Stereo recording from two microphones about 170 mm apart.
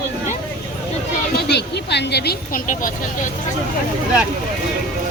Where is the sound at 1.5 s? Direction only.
80° left.